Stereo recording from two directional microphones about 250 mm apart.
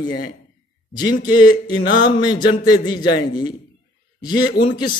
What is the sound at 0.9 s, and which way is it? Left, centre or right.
Speech, centre.